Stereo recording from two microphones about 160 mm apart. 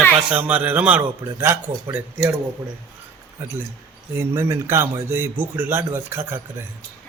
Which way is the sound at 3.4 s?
20° right (ahead or behind).